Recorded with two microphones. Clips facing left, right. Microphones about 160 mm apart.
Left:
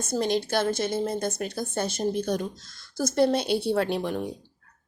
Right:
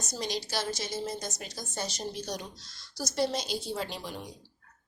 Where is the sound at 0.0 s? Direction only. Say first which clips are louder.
Left 9 dB; 55° left (ahead or behind).